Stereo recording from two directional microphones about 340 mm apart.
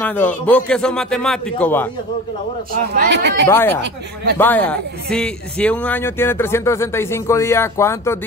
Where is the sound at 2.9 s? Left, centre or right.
Right.